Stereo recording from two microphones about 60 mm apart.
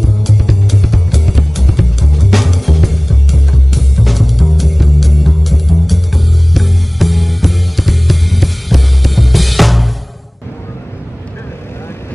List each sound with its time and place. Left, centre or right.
0.0 s music: centre